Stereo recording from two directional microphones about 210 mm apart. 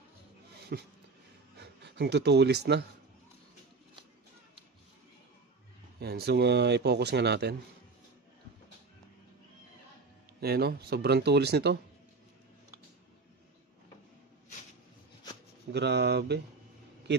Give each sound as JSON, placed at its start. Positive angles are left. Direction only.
{"t": 0.7, "sound": "speech", "side_deg": -50}
{"t": 5.9, "sound": "speech", "side_deg": -50}
{"t": 10.4, "sound": "speech", "side_deg": -50}
{"t": 15.7, "sound": "speech", "side_deg": -55}